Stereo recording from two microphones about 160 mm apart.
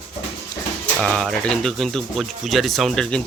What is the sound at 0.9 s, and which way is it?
Speech, 5° left (ahead or behind).